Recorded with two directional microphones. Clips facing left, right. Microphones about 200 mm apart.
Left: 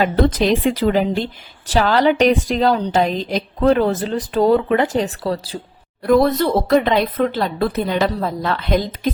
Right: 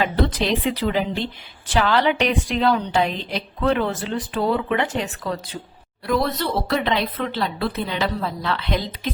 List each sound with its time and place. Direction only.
0.3 s a woman's voice: 45° left (ahead or behind)
6.1 s a woman's voice: 50° left (ahead or behind)